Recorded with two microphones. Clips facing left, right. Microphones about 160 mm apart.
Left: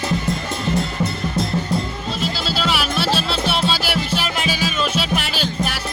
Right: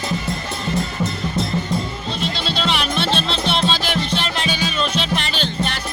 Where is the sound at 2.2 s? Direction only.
5° left (ahead or behind).